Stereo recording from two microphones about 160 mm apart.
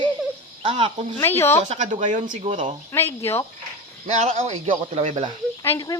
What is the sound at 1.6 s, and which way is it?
Speech, 50° right (ahead or behind).